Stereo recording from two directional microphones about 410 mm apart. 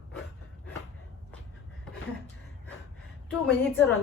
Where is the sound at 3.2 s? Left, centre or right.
Centre.